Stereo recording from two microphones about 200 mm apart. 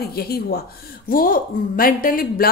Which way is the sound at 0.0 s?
50° left (ahead or behind).